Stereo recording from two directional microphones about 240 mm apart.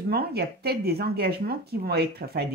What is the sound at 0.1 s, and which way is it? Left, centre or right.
Speech, right.